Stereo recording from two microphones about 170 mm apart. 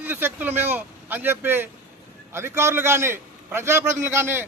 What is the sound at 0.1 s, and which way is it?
A man's voice, 10° right (ahead or behind).